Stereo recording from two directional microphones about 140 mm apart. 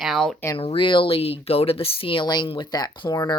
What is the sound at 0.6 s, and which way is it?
Speech, 40° left (ahead or behind).